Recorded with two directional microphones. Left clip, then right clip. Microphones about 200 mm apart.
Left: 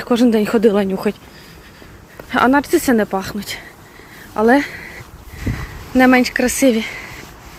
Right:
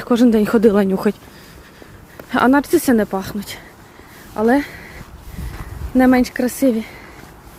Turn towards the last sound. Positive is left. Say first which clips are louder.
# left 3 dB
turn(degrees=-5)  # may be behind; listen again after turning